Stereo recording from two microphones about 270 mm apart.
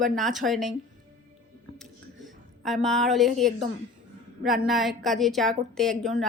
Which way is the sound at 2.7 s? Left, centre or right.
Centre.